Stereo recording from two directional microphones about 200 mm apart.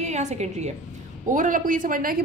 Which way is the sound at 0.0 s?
35° right (ahead or behind).